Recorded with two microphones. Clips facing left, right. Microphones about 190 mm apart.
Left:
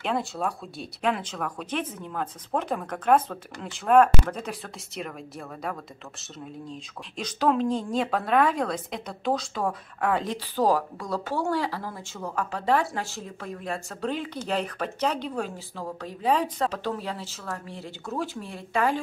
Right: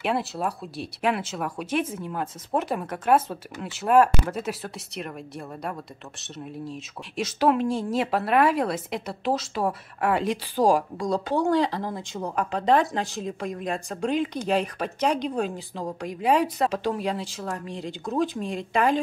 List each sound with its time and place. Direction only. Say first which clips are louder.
0.0 s speech: right 2 dB; 5° right (ahead or behind)
7.2 s speech: right 2 dB; 10° right (ahead or behind)